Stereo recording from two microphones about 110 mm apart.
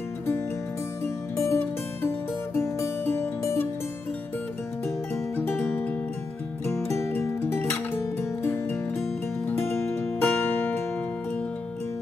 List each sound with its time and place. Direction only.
1.0 s music: 25° left (ahead or behind)
5.3 s music: 20° left (ahead or behind)